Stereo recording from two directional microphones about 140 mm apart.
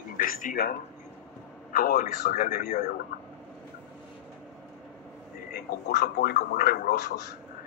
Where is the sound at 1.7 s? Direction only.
90° left; by 2.9 s 75° left (ahead or behind).